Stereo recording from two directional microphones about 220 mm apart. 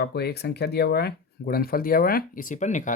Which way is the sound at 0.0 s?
45° left (ahead or behind).